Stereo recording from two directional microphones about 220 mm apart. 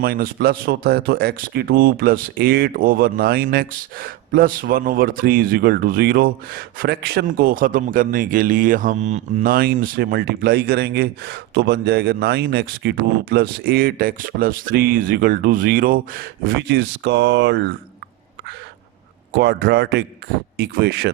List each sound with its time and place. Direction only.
0.0 s speech: 45° right (ahead or behind)
19.4 s speech: 45° right (ahead or behind)